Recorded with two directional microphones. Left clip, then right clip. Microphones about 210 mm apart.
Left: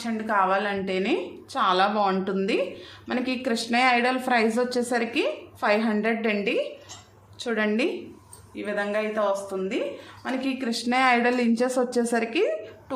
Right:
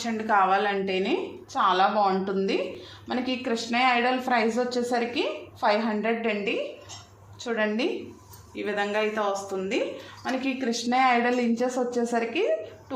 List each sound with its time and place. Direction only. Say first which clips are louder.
0.0 s a woman's voice: right 1 dB; 5° left (ahead or behind); by 7.9 s 20° left (ahead or behind)
8.5 s speech: even; centre (ahead or behind)
10.2 s speech: even; 15° left (ahead or behind)